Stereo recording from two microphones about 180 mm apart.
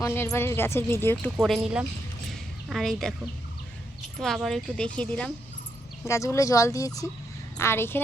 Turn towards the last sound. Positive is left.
turn(degrees=15)  # may be behind; listen again after turning